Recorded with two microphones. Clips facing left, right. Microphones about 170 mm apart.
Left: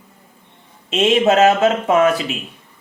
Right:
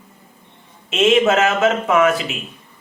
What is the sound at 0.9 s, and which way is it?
Speech, 35° left (ahead or behind).